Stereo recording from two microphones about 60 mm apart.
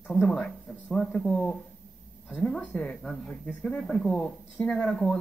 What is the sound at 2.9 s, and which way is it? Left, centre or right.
A woman's voice, centre.